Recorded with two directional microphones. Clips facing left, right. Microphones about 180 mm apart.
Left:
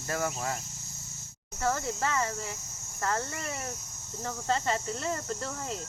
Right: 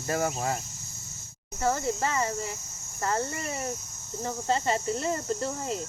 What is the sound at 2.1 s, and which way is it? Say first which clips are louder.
Cricket: right 2 dB; 10° right (ahead or behind).